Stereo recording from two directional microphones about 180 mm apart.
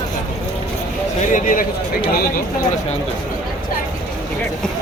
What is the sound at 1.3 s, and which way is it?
Speech, 45° left (ahead or behind).